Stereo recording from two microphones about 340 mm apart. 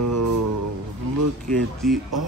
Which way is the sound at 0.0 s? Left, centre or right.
Right.